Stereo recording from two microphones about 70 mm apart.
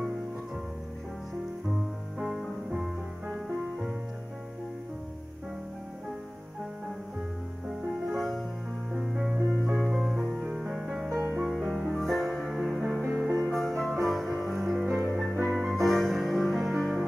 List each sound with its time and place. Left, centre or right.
2.1 s music: centre
8.1 s music: centre
13.0 s music: right
13.5 s music: centre